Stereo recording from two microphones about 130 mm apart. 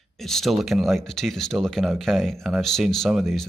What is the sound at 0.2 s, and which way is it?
Speech, centre (ahead or behind).